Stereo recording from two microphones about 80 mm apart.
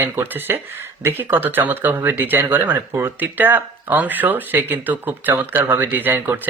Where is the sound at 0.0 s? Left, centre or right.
Right.